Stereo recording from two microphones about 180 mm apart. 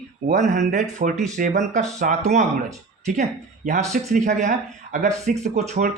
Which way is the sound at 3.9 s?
40° right (ahead or behind).